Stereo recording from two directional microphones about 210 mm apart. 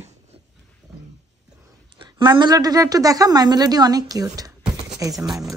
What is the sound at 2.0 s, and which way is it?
A woman's voice, 20° right (ahead or behind).